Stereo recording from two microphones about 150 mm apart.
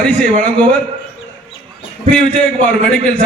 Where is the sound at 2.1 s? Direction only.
5° left (ahead or behind).